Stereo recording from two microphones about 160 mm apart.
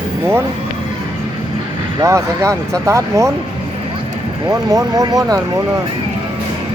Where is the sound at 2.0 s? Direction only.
20° right (ahead or behind).